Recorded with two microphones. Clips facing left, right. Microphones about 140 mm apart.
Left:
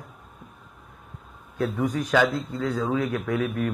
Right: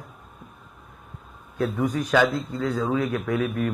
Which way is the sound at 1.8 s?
25° right (ahead or behind).